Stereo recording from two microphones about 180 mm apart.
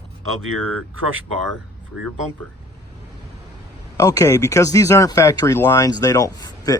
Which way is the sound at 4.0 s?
20° left (ahead or behind).